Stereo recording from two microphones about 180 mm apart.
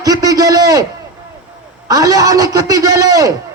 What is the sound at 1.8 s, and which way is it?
A man's voice, 20° right (ahead or behind).